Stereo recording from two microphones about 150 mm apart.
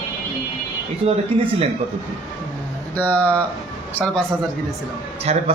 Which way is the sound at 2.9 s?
10° left (ahead or behind).